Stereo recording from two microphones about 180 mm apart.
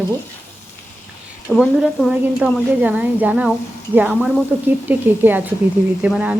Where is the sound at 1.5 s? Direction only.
Centre (ahead or behind).